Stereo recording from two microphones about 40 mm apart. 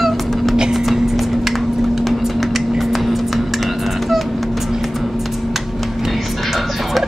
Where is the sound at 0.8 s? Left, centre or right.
Centre.